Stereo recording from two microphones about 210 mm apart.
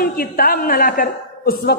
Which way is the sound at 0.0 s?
45° left (ahead or behind).